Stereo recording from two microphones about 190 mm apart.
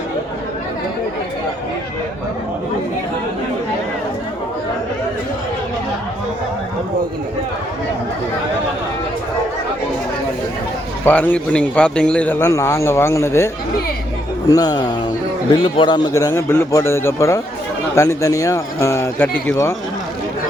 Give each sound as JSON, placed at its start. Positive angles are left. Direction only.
{"t": 11.0, "sound": "a man's voice", "side_deg": 10}